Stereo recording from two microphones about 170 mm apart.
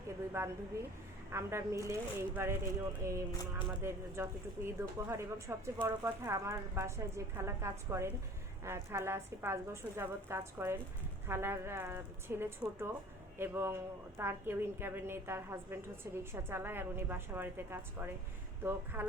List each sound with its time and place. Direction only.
0.4 s speech: 15° right (ahead or behind)